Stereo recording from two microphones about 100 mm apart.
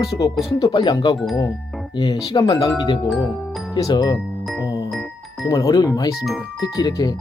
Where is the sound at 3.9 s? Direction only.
40° left (ahead or behind).